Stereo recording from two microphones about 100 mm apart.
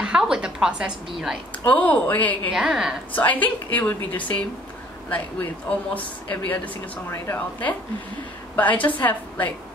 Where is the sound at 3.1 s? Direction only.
15° left (ahead or behind).